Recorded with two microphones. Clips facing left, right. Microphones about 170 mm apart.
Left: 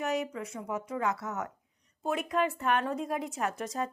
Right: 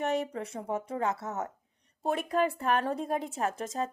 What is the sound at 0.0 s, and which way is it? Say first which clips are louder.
Speech: right 2 dB; 30° right (ahead or behind).